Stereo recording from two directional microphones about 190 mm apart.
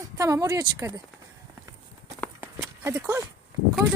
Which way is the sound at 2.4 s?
15° right (ahead or behind).